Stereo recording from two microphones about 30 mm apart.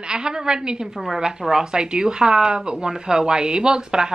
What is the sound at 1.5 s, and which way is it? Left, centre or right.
Speech, right.